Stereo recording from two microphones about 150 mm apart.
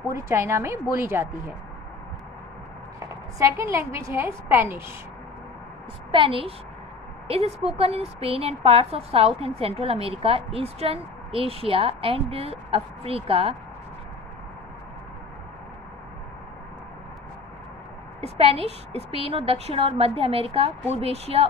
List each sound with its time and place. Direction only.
0.1 s a woman's voice: 15° right (ahead or behind)
3.3 s a woman's voice: 20° right (ahead or behind)
6.1 s a woman's voice: 35° right (ahead or behind)
18.4 s a woman's voice: 40° right (ahead or behind)